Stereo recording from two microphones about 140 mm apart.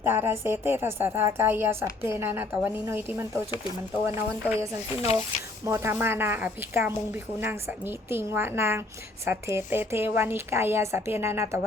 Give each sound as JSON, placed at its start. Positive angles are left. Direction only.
{"t": 0.0, "sound": "a woman's voice", "side_deg": -15}